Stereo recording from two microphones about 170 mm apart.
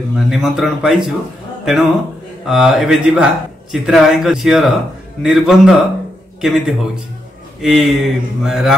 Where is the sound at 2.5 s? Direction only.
Centre (ahead or behind).